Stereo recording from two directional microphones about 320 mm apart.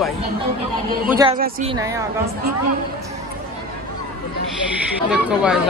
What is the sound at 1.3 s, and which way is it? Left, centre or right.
Speech, right.